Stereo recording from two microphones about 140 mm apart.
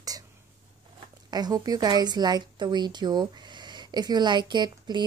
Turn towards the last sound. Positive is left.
turn(degrees=-30)  # may be behind; listen again after turning